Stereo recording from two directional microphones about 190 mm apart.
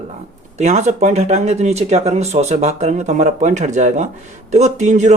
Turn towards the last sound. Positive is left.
turn(degrees=-35)  # may be behind; listen again after turning